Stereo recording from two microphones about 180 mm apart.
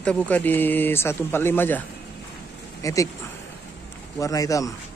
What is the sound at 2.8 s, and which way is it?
Speech, 20° left (ahead or behind).